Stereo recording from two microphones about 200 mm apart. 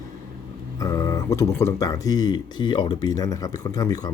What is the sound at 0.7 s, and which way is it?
Speech, 15° left (ahead or behind).